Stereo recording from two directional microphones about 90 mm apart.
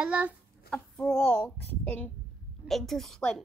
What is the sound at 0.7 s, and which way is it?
A child's voice, 10° left (ahead or behind).